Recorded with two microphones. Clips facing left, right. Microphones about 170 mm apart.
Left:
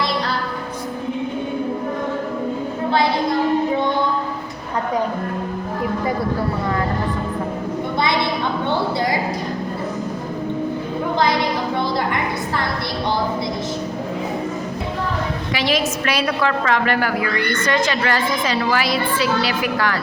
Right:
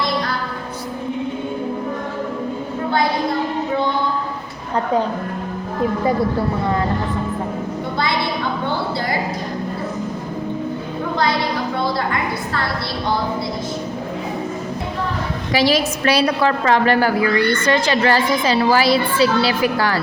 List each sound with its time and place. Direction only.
15.5 s a woman's voice: 35° right (ahead or behind)